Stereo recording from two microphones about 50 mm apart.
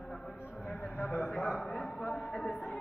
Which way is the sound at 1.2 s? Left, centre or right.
Centre.